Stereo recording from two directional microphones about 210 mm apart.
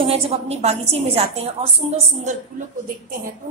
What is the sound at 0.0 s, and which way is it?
A woman's voice, 30° right (ahead or behind).